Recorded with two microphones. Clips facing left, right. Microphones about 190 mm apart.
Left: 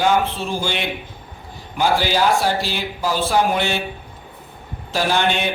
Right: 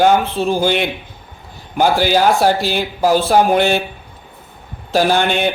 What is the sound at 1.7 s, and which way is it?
Speech, 50° right (ahead or behind).